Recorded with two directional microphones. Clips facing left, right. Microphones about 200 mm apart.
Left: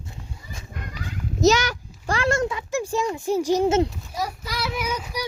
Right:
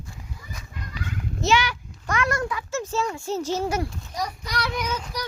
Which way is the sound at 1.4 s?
40° left (ahead or behind).